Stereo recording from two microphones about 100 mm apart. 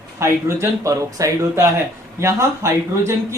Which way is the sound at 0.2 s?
30° right (ahead or behind).